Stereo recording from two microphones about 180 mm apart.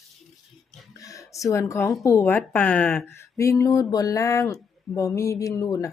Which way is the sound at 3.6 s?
20° left (ahead or behind).